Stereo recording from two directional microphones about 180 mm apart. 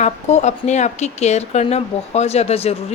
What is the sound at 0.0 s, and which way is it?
Speech, 40° left (ahead or behind).